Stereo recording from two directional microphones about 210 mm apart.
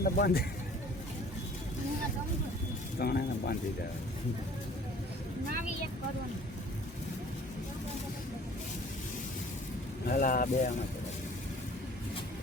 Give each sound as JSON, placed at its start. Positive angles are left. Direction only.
{"t": 0.0, "sound": "speech", "side_deg": 45}
{"t": 3.0, "sound": "speech", "side_deg": 45}
{"t": 10.1, "sound": "speech", "side_deg": 40}